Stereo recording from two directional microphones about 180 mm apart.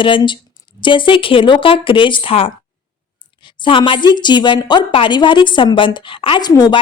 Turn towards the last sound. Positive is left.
turn(degrees=20)  # may be behind; listen again after turning